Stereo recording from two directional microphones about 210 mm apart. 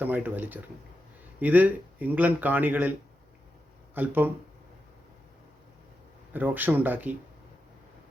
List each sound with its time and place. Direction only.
0.0 s speech: 10° right (ahead or behind)
3.9 s speech: 10° right (ahead or behind)
6.3 s speech: 10° right (ahead or behind)